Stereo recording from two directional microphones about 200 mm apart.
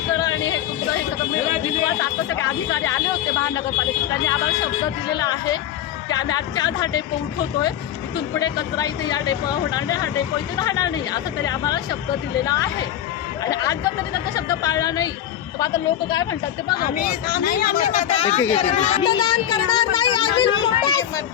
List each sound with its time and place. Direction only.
0.1 s music: 20° left (ahead or behind)
2.0 s speech: 15° left (ahead or behind)
5.1 s speech: 20° left (ahead or behind)
8.1 s speech: 20° left (ahead or behind)
16.8 s speech: 45° left (ahead or behind); by 21.0 s 25° left (ahead or behind)